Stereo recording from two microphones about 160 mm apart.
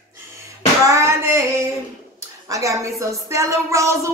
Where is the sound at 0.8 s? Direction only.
15° right (ahead or behind).